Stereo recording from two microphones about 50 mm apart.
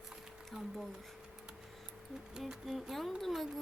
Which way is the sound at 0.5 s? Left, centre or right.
Centre.